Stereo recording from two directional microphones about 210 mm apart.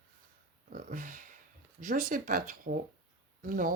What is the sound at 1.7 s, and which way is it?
Speech, 40° right (ahead or behind).